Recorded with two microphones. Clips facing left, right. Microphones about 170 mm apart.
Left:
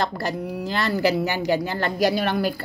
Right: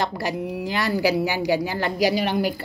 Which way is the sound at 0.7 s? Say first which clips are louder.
Even; 15° right (ahead or behind).